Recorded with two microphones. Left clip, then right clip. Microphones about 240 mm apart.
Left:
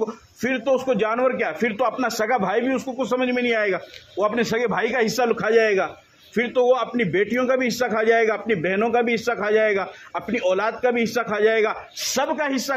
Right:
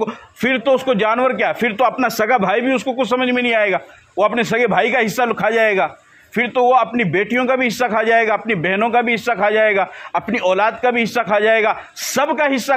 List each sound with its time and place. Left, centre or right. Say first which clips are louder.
0.0 s a man's voice: right 6 dB; right